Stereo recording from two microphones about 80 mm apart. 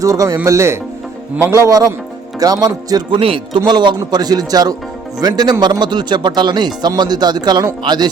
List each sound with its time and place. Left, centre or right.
0.0 s a man's voice: right
3.1 s music: right
3.7 s speech: right